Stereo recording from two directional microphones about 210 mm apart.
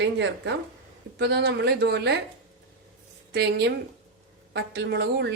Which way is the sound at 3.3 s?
50° right (ahead or behind).